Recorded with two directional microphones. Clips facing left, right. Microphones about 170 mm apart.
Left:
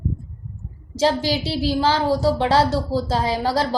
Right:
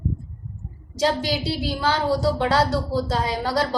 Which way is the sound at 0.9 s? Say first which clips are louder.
Left 3 dB; 25° left (ahead or behind).